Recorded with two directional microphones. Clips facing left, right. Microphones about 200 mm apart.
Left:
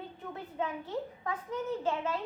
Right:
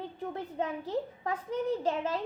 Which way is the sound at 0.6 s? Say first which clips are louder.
Right 2 dB; 35° right (ahead or behind).